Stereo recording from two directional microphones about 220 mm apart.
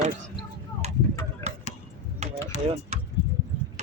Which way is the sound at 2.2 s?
30° right (ahead or behind).